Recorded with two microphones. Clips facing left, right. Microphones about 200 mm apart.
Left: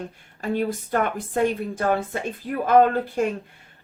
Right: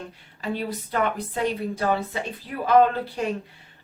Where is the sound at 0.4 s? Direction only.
50° left (ahead or behind).